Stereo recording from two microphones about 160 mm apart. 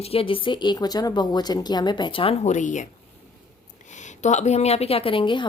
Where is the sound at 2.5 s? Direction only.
50° left (ahead or behind).